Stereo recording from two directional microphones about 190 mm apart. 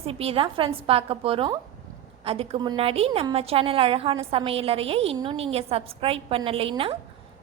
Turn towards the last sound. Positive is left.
turn(degrees=-30)  # may be behind; listen again after turning